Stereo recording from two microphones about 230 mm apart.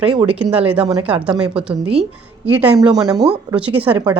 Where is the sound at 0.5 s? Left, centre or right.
Right.